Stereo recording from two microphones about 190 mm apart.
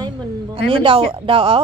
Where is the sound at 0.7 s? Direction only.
25° right (ahead or behind).